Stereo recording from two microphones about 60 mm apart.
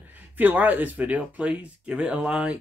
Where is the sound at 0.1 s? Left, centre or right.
Right.